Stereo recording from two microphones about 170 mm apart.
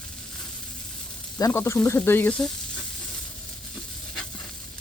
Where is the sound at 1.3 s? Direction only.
20° left (ahead or behind).